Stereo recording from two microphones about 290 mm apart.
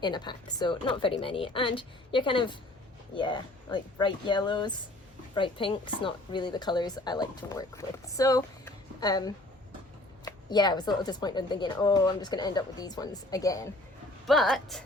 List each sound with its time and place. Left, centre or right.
0.0 s a woman's voice: centre
14.3 s speech: centre